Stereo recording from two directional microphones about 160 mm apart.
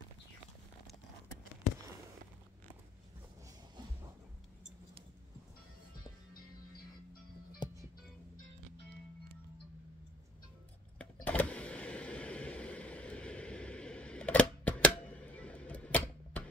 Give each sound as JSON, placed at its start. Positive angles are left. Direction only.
{"t": 7.6, "sound": "music", "side_deg": 30}
{"t": 11.2, "sound": "vehicle", "side_deg": 10}